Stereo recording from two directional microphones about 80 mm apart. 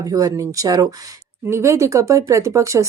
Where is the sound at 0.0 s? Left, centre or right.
Right.